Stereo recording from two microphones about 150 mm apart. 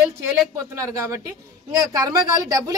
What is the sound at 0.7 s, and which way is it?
A woman's voice, 20° right (ahead or behind).